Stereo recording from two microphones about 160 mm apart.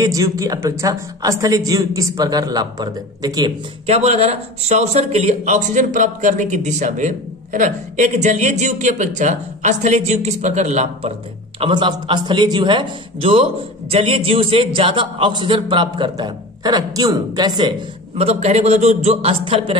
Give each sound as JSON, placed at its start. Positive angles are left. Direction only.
{"t": 0.0, "sound": "speech", "side_deg": -20}
{"t": 3.8, "sound": "a man's voice", "side_deg": -40}
{"t": 11.6, "sound": "a man's voice", "side_deg": -30}